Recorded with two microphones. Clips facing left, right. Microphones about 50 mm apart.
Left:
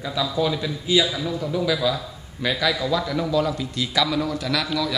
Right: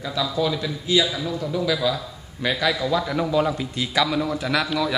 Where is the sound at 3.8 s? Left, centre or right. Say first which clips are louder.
Even; centre.